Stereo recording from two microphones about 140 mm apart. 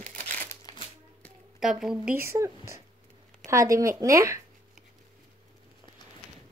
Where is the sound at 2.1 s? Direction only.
20° right (ahead or behind).